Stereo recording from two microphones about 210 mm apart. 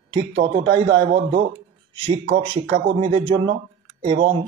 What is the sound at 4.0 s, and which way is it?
Speech, 25° right (ahead or behind).